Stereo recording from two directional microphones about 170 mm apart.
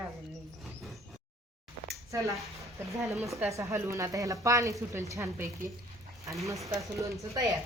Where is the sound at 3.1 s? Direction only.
Centre (ahead or behind).